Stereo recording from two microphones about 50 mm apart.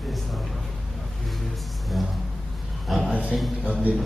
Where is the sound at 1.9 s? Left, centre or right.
Centre.